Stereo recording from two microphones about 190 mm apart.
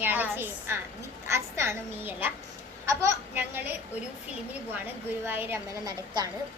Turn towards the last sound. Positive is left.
turn(degrees=-20)  # may be behind; listen again after turning